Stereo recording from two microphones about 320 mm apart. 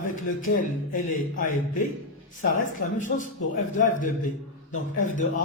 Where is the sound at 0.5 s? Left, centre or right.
Left.